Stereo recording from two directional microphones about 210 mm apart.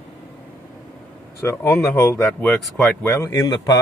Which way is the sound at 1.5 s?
10° left (ahead or behind).